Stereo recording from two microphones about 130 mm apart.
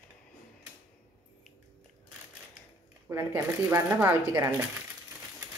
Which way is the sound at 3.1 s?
20° right (ahead or behind).